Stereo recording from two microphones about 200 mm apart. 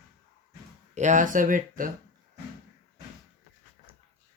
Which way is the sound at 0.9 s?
35° right (ahead or behind).